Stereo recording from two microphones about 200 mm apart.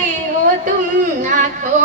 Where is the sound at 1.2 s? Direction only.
40° right (ahead or behind).